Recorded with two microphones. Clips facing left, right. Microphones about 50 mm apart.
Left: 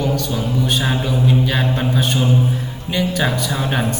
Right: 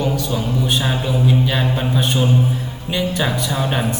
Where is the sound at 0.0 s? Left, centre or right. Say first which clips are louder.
Even; centre.